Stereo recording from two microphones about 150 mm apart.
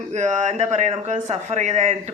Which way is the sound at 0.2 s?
55° right (ahead or behind).